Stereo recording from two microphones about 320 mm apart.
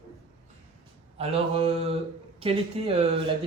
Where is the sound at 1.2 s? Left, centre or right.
Centre.